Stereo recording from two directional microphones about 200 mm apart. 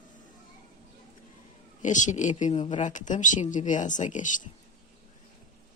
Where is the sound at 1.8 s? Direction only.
40° left (ahead or behind).